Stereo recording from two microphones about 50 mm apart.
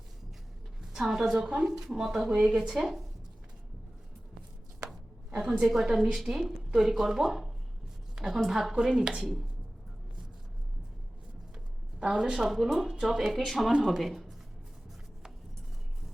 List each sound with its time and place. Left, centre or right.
0.8 s a woman's voice: centre
1.4 s a woman's voice: centre
5.3 s a woman's voice: centre
8.1 s a sound: centre
8.4 s a woman's voice: centre
11.9 s speech: centre
12.4 s speech: centre
12.6 s speech: centre
12.9 s a woman's voice: centre